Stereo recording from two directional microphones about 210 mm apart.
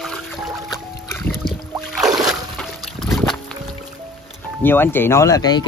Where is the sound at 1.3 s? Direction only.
Centre (ahead or behind).